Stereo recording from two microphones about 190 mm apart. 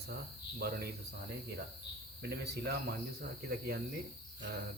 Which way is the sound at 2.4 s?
55° right (ahead or behind).